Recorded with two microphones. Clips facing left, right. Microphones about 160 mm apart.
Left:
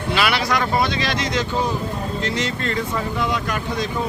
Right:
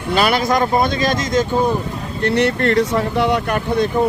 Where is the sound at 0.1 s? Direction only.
45° right (ahead or behind).